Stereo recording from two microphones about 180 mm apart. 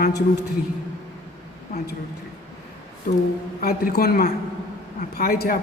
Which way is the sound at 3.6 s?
55° left (ahead or behind).